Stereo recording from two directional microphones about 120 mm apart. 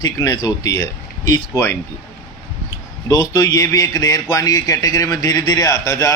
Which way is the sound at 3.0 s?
30° left (ahead or behind).